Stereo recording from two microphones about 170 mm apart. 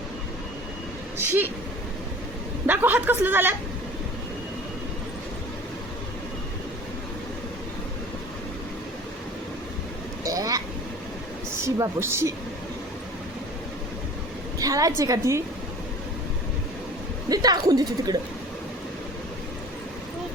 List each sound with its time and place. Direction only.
2.6 s a woman's voice: 10° right (ahead or behind)
10.2 s vehicle: 20° right (ahead or behind)
11.5 s speech: 15° right (ahead or behind)
14.6 s speech: 20° right (ahead or behind)
17.2 s speech: 25° right (ahead or behind)